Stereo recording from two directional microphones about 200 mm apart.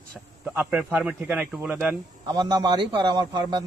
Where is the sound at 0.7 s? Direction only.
10° right (ahead or behind).